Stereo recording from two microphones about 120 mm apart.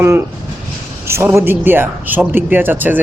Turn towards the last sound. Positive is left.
turn(degrees=-15)  # may be behind; listen again after turning